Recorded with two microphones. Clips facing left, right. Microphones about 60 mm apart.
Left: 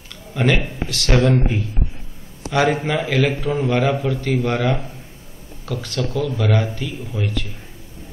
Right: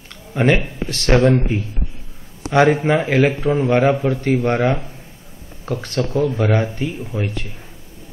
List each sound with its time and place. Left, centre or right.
0.1 s a sound: right
0.8 s speech: right
2.5 s speech: right